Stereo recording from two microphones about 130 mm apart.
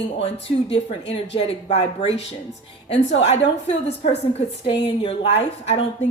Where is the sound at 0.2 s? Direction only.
50° left (ahead or behind).